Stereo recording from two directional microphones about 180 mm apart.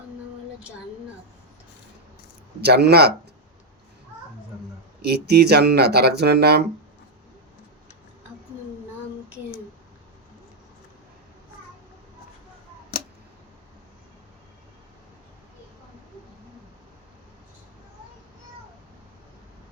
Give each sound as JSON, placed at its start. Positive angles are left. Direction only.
{"t": 2.6, "sound": "speech", "side_deg": -65}
{"t": 5.0, "sound": "speech", "side_deg": -65}